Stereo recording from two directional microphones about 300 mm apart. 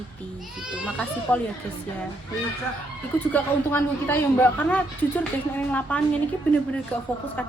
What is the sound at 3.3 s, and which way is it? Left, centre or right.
Speech, centre.